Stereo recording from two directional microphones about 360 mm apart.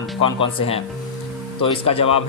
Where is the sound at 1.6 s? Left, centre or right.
Centre.